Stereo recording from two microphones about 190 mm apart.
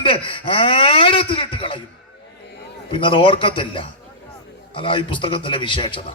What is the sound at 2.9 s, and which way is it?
Speech, 25° left (ahead or behind).